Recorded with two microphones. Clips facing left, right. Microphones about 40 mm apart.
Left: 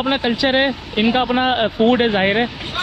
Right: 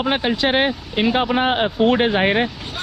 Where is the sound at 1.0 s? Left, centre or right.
Left.